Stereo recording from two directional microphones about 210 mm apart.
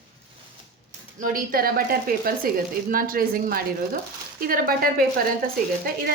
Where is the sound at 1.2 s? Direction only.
40° right (ahead or behind).